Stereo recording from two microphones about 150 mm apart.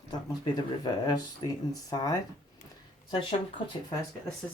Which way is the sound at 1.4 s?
30° left (ahead or behind).